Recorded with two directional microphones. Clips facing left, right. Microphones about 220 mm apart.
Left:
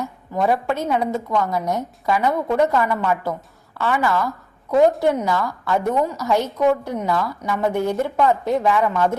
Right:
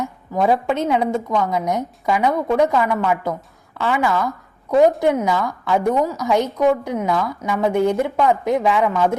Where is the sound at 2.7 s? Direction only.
5° right (ahead or behind).